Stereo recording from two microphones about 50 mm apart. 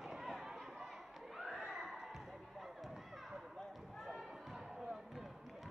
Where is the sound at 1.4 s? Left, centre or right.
Centre.